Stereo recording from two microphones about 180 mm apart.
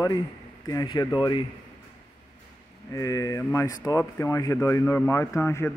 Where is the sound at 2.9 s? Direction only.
20° left (ahead or behind).